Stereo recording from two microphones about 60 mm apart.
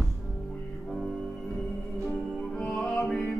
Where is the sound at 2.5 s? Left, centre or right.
Centre.